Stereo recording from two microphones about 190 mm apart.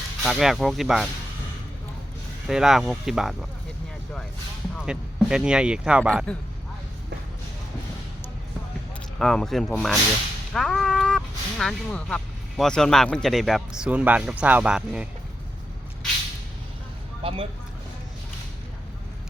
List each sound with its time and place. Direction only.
0.2 s speech: centre (ahead or behind)
2.5 s speech: centre (ahead or behind)
4.8 s speech: 5° right (ahead or behind)
9.1 s speech: centre (ahead or behind)
17.2 s speech: 30° right (ahead or behind)